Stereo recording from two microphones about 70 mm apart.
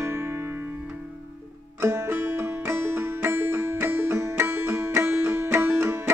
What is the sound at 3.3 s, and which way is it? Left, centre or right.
Music, right.